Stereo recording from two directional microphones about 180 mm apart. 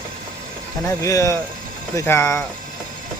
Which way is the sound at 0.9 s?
15° left (ahead or behind).